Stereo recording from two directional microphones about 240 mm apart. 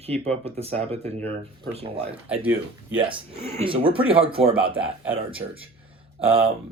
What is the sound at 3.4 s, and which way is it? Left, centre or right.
Speech, right.